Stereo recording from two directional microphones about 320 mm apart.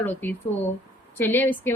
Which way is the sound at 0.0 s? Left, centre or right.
Centre.